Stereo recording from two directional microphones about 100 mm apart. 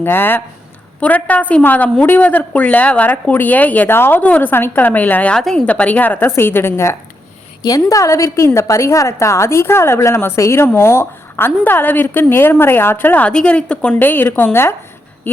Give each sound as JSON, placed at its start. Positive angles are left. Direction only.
{"t": 0.0, "sound": "a woman's voice", "side_deg": 20}
{"t": 5.4, "sound": "a woman's voice", "side_deg": 5}
{"t": 7.6, "sound": "a woman's voice", "side_deg": 35}